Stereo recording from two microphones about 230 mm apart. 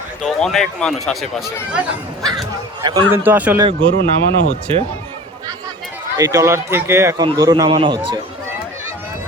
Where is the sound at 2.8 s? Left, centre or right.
Centre.